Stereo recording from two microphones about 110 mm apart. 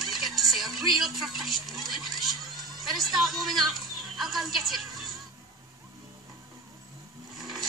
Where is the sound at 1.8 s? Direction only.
Centre (ahead or behind).